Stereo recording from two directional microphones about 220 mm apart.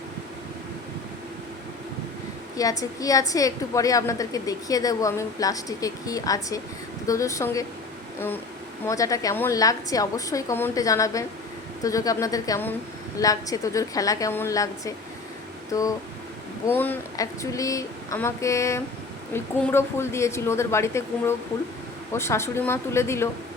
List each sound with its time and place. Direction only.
2.6 s a woman's voice: 15° left (ahead or behind)
8.9 s a woman's voice: 15° left (ahead or behind)